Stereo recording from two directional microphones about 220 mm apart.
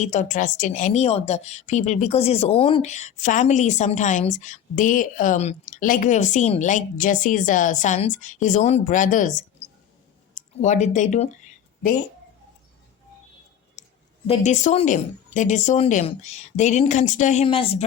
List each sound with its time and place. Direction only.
0.0 s a woman's voice: 35° left (ahead or behind)
13.8 s a sound: 30° left (ahead or behind)
14.3 s a woman's voice: 30° left (ahead or behind)